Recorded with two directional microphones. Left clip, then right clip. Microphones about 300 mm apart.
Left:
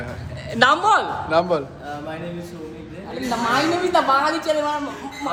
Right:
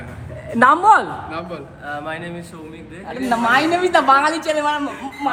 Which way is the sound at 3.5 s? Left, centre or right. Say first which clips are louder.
Right 3 dB; right.